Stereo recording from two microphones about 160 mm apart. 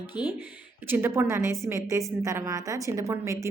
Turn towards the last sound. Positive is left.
turn(degrees=-20)  # may be behind; listen again after turning